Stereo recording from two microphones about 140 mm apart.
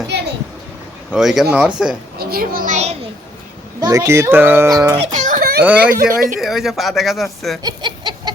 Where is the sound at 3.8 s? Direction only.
25° right (ahead or behind).